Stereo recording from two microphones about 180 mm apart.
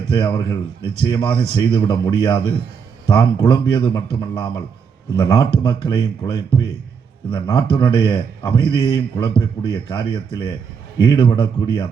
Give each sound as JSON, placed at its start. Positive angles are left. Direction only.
{"t": 0.1, "sound": "a man's voice", "side_deg": 25}